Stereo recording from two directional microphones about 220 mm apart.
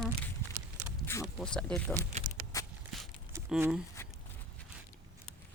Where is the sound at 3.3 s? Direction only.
5° right (ahead or behind).